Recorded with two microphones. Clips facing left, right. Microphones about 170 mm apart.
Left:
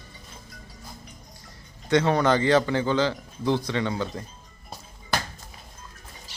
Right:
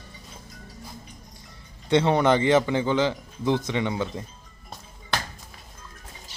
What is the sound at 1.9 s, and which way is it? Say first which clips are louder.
A man's voice: right 1 dB; 25° right (ahead or behind).